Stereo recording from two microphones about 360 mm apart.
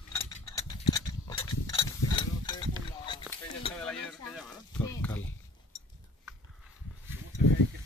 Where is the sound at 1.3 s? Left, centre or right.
Centre.